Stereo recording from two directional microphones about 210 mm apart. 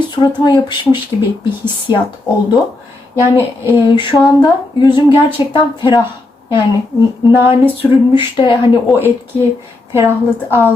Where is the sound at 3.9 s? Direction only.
20° left (ahead or behind).